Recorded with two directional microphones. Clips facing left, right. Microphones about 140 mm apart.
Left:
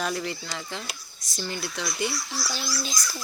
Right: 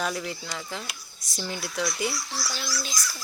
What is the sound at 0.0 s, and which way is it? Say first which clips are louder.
Speech: left 1 dB; centre (ahead or behind).